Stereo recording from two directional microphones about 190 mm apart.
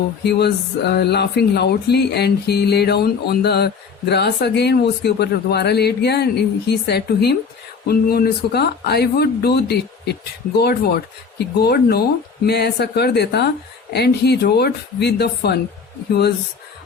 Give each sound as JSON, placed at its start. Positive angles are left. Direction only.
{"t": 0.3, "sound": "speech", "side_deg": 60}